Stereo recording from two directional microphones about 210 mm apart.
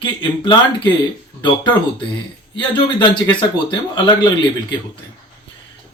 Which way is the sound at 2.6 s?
20° left (ahead or behind).